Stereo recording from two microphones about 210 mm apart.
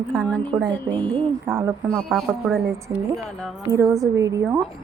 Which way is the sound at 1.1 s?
15° right (ahead or behind).